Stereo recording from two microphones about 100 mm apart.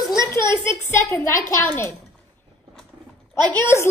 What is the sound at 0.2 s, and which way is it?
A woman's voice, 30° left (ahead or behind).